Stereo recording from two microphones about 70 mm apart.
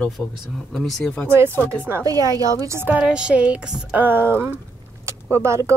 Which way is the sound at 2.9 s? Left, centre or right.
Centre.